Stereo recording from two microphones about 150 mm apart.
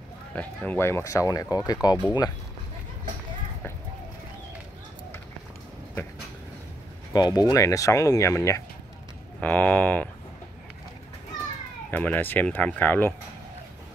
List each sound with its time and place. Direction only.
0.3 s speech: 10° left (ahead or behind)
7.1 s speech: 25° left (ahead or behind); by 10.0 s 10° left (ahead or behind)
11.9 s speech: 10° left (ahead or behind)